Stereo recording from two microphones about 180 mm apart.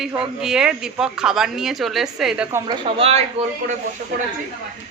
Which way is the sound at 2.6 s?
30° right (ahead or behind).